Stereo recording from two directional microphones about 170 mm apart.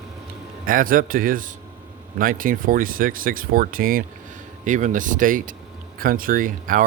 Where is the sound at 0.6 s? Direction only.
55° right (ahead or behind).